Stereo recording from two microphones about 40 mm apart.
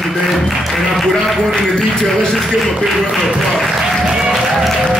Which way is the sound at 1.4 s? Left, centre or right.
Centre.